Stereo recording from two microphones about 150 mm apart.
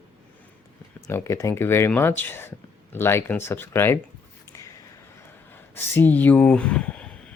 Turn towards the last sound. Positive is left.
turn(degrees=10)  # may be behind; listen again after turning